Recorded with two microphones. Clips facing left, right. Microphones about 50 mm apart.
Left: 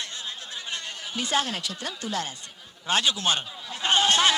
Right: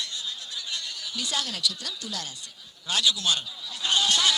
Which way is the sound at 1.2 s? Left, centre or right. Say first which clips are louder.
Left 4 dB; left.